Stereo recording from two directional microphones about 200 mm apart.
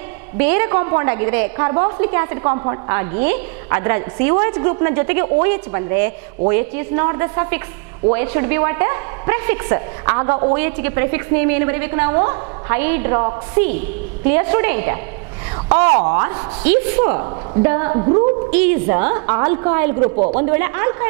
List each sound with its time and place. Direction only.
0.4 s a woman's voice: 10° right (ahead or behind)
18.5 s a woman's voice: 10° right (ahead or behind)